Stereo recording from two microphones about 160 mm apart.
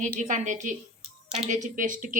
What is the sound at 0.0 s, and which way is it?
A woman's voice, 50° right (ahead or behind).